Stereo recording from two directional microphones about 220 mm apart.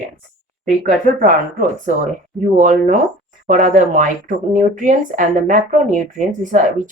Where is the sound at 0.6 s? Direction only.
35° right (ahead or behind).